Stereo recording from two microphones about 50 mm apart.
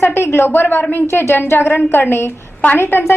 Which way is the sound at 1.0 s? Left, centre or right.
Left.